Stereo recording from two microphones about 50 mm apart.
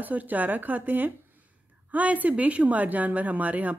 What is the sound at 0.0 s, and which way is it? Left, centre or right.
A woman's voice, right.